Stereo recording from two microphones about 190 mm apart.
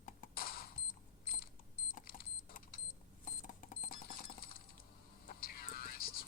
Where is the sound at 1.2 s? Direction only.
50° left (ahead or behind).